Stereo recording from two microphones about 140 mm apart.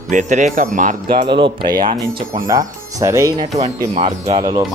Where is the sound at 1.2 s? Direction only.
35° right (ahead or behind).